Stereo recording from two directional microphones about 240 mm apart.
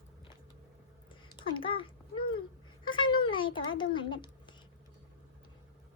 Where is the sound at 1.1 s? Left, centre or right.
Left.